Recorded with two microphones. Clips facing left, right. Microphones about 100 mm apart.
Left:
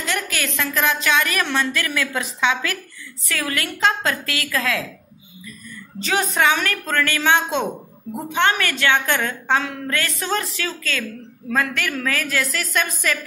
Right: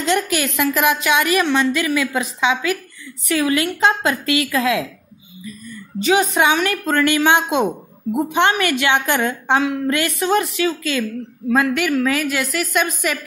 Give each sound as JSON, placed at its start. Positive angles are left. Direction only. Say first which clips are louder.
{"t": 0.0, "sound": "a woman's voice", "louder": "right 7 dB", "side_deg": -20}
{"t": 6.0, "sound": "a woman's voice", "louder": "right 4 dB", "side_deg": -10}